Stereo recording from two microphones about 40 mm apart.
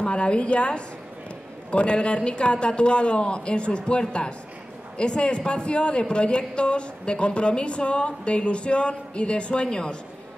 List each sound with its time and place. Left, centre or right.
0.0 s speech: left